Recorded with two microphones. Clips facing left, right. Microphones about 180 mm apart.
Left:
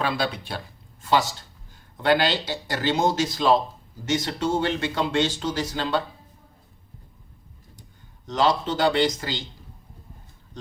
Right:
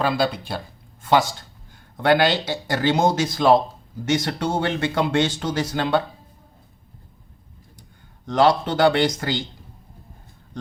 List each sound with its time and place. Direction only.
0.0 s speech: 40° right (ahead or behind)
2.0 s speech: 55° right (ahead or behind)
8.3 s speech: 55° right (ahead or behind)